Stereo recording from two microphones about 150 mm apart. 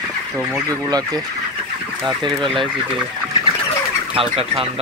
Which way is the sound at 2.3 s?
Centre (ahead or behind).